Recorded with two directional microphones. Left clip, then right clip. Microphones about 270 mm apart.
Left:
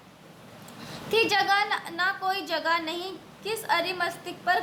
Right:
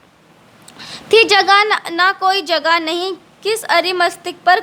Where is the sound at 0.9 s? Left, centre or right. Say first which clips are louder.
Right 13 dB; right.